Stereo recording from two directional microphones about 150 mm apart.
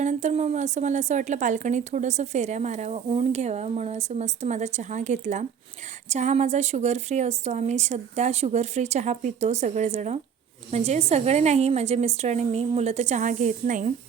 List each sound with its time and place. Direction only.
0.0 s a woman's voice: 50° right (ahead or behind)